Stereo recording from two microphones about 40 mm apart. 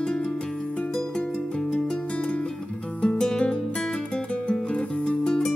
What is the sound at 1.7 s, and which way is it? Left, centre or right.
Music, left.